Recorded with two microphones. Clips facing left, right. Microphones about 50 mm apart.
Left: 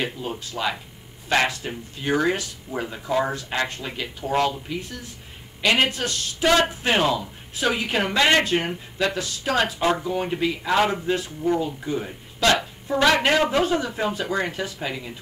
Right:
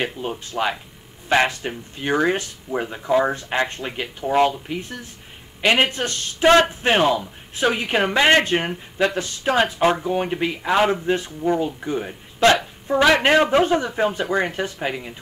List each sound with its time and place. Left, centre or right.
0.4 s speech: right
10.8 s speech: centre